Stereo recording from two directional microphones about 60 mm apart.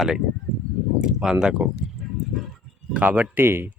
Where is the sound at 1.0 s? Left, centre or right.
Centre.